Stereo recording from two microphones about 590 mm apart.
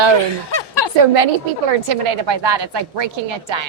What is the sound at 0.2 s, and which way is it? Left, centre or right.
Speech, left.